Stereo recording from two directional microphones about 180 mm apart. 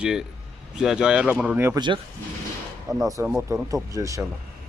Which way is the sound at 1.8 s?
25° right (ahead or behind).